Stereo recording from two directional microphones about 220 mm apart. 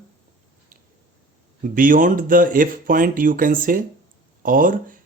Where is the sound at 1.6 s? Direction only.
40° right (ahead or behind).